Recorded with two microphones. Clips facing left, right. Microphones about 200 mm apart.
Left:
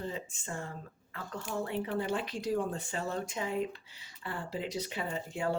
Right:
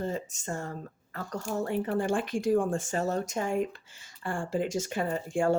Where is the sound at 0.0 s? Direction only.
45° right (ahead or behind).